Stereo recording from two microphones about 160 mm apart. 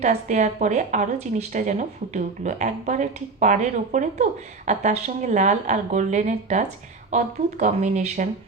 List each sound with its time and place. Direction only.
0.0 s speech: 45° right (ahead or behind)